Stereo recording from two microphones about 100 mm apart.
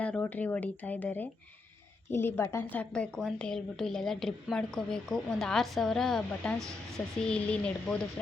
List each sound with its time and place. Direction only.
0.0 s a woman's voice: 15° left (ahead or behind)
2.6 s a woman's voice: 15° left (ahead or behind)